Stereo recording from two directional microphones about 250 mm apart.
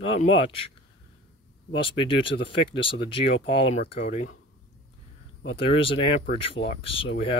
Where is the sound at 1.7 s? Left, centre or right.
Left.